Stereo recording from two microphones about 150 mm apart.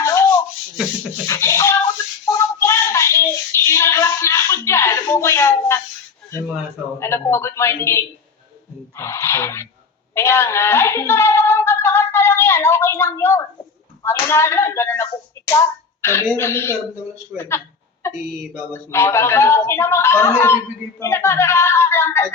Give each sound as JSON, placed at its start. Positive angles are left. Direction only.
{"t": 0.0, "sound": "rub", "side_deg": 20}
{"t": 1.3, "sound": "a sound", "side_deg": 20}
{"t": 7.0, "sound": "a child's voice", "side_deg": 15}
{"t": 18.0, "sound": "speech", "side_deg": 20}